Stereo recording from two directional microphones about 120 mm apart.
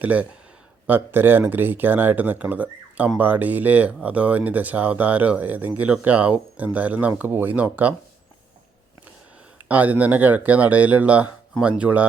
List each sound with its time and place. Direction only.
0.0 s speech: 15° right (ahead or behind)
9.6 s speech: 15° right (ahead or behind)